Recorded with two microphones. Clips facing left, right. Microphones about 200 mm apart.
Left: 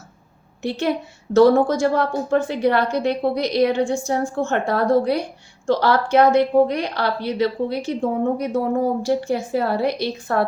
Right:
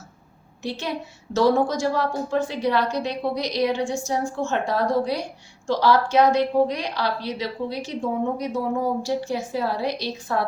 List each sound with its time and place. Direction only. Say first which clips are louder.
0.6 s a woman's voice: left 7 dB; 55° left (ahead or behind)